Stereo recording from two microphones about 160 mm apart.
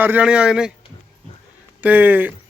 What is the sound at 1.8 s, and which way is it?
Speech, 10° right (ahead or behind).